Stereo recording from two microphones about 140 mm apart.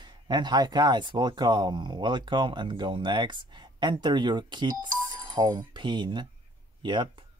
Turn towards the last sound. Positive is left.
turn(degrees=-35)  # may be behind; listen again after turning